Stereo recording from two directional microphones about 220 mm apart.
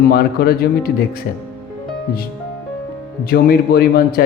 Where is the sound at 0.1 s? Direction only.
45° left (ahead or behind).